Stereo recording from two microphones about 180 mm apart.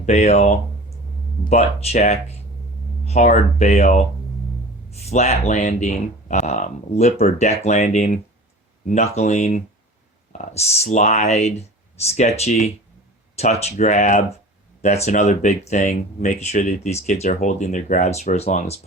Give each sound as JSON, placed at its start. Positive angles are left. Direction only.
{"t": 0.0, "sound": "speech", "side_deg": 35}
{"t": 5.0, "sound": "speech", "side_deg": 35}